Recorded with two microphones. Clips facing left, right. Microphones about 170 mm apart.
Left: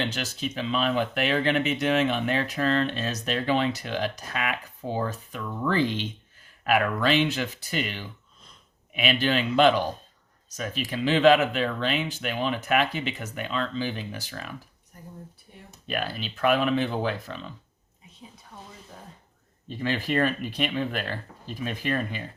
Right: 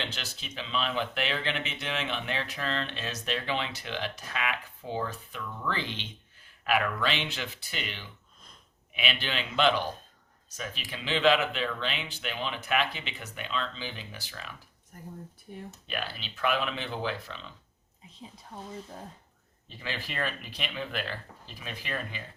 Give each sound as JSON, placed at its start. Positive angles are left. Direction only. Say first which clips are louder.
{"t": 0.0, "sound": "speech", "louder": "left 9 dB", "side_deg": 45}
{"t": 15.9, "sound": "speech", "louder": "left 7 dB", "side_deg": 45}
{"t": 19.8, "sound": "speech", "louder": "left 10 dB", "side_deg": 45}